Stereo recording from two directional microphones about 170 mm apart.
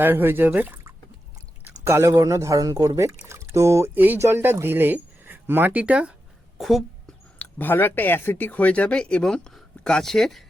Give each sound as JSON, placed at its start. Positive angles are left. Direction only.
{"t": 0.0, "sound": "a woman's voice", "side_deg": -10}
{"t": 7.3, "sound": "speech", "side_deg": 10}